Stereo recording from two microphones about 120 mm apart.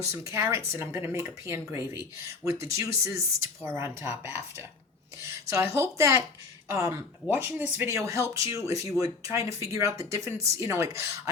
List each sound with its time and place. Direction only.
0.0 s speech: 25° right (ahead or behind)